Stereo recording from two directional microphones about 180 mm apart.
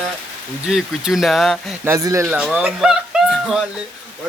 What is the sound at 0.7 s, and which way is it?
Speech, centre (ahead or behind).